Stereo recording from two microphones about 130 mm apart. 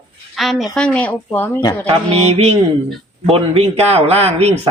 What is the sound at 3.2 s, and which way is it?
Speech, 50° right (ahead or behind).